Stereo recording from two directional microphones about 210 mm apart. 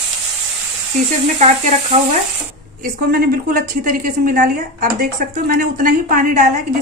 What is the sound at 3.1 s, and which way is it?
A woman's voice, 45° right (ahead or behind).